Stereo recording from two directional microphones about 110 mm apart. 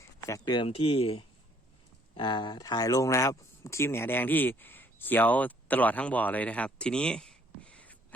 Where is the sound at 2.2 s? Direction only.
45° left (ahead or behind).